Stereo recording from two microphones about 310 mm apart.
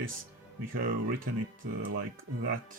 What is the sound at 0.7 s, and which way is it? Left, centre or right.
Speech, right.